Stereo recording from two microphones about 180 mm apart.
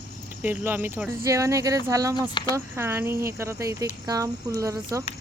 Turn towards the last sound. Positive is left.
turn(degrees=-15)  # may be behind; listen again after turning